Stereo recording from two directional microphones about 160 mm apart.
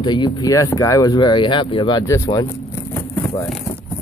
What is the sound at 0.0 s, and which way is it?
Speech, 30° left (ahead or behind).